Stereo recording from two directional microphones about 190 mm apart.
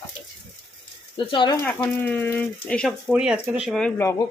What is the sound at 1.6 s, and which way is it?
Speech, 10° left (ahead or behind).